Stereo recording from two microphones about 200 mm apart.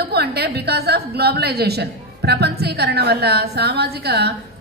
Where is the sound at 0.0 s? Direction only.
55° right (ahead or behind).